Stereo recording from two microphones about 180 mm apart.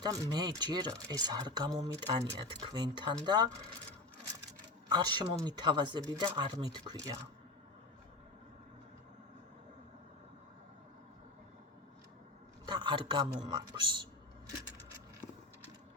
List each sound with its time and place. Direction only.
0.0 s speech: 25° right (ahead or behind)
4.9 s speech: 25° right (ahead or behind)
12.6 s speech: 25° right (ahead or behind)